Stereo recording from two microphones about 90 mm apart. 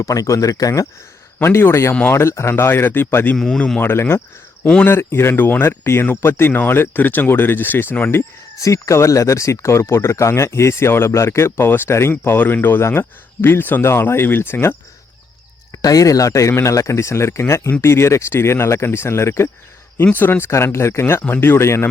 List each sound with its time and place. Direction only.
0.0 s speech: 40° left (ahead or behind)
1.4 s speech: 25° left (ahead or behind)
3.3 s speech: 5° left (ahead or behind)
3.8 s speech: 25° left (ahead or behind)
8.6 s speech: 35° left (ahead or behind)
15.7 s speech: 40° left (ahead or behind)